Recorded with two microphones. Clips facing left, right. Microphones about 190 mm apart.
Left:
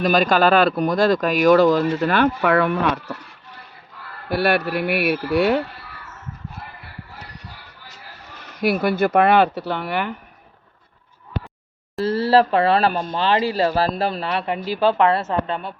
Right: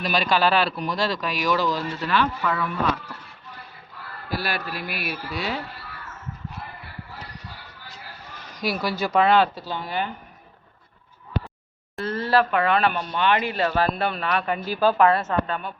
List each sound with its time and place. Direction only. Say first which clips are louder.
0.0 s speech: left 5 dB; 45° left (ahead or behind); by 3.2 s 70° left (ahead or behind)
4.3 s speech: left 9 dB; 60° left (ahead or behind)
8.5 s speech: left 7 dB; 55° left (ahead or behind)
12.0 s speech: left 5 dB; 35° left (ahead or behind)